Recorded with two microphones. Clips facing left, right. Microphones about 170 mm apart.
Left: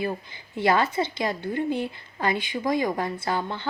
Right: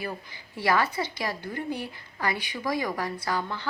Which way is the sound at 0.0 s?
25° left (ahead or behind).